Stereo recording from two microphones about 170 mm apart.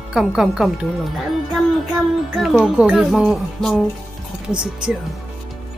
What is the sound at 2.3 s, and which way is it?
A child's voice, centre (ahead or behind).